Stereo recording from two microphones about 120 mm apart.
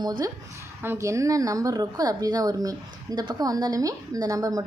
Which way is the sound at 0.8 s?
20° right (ahead or behind).